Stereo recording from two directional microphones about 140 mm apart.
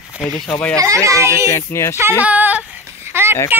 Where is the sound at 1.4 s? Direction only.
20° left (ahead or behind).